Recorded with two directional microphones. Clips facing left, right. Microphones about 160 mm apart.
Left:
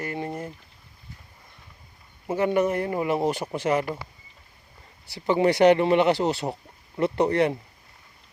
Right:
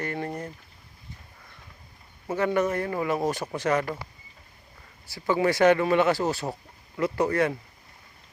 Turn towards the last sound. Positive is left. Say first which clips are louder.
# left 2 dB
turn(degrees=20)  # may be behind; listen again after turning